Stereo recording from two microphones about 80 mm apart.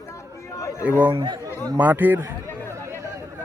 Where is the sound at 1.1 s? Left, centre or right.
Right.